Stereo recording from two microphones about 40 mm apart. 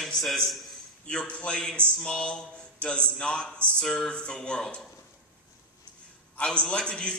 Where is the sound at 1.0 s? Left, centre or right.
Left.